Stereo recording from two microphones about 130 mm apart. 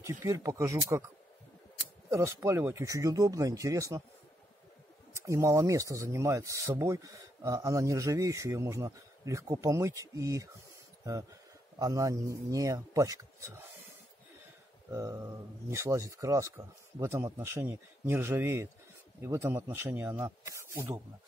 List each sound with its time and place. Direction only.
0.0 s speech: 20° right (ahead or behind)
2.0 s speech: 20° right (ahead or behind)
5.1 s speech: 20° right (ahead or behind)
11.8 s speech: 25° right (ahead or behind)
14.9 s speech: 25° right (ahead or behind)